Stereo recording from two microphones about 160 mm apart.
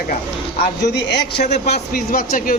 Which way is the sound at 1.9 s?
65° left (ahead or behind).